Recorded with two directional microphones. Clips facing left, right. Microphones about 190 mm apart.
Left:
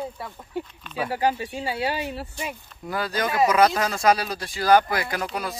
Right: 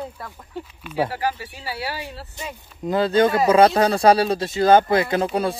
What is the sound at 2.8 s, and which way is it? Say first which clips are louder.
Speech: right 10 dB; 25° right (ahead or behind).